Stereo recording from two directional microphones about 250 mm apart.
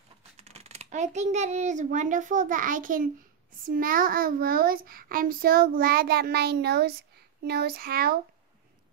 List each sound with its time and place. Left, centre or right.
0.4 s a child's voice: right